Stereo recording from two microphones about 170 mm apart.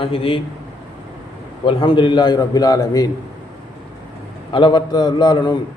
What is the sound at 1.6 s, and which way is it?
A man's voice, 30° left (ahead or behind).